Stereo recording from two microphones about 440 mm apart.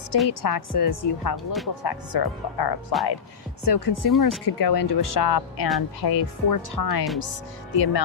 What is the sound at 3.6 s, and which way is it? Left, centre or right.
Speech, left.